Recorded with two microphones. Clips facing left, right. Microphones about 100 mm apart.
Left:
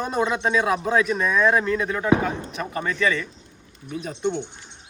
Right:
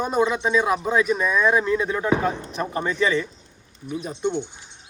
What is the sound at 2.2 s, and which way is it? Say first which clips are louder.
Speech: right 2 dB; 30° right (ahead or behind).